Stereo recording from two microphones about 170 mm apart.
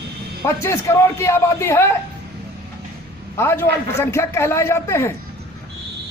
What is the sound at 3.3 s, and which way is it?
A man's voice, 15° left (ahead or behind).